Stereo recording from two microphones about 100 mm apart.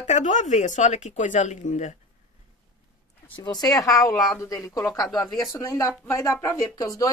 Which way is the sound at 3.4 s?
40° left (ahead or behind).